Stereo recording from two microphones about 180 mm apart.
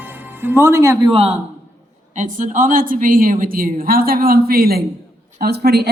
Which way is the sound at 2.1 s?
45° right (ahead or behind).